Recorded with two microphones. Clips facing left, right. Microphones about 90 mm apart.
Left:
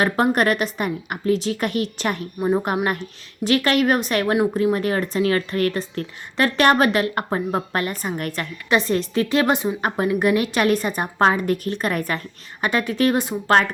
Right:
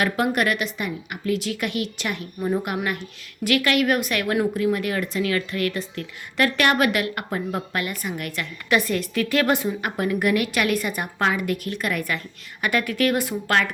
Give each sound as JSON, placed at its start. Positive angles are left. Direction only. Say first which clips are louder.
{"t": 0.0, "sound": "a woman's voice", "louder": "left 3 dB", "side_deg": 40}
{"t": 12.6, "sound": "a woman's voice", "louder": "left 2 dB", "side_deg": 25}